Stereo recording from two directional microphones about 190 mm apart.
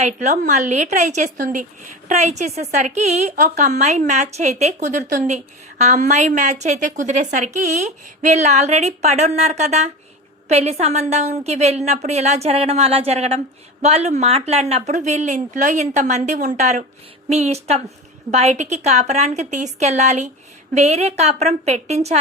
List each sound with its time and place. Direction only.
0.0 s a woman's voice: 35° right (ahead or behind)